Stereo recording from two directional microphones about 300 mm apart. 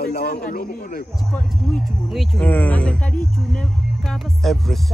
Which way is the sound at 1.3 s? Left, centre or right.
Centre.